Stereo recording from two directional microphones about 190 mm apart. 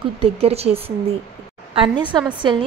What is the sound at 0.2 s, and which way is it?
A woman's voice, 30° right (ahead or behind).